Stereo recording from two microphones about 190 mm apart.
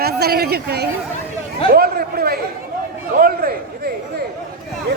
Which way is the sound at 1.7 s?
55° right (ahead or behind).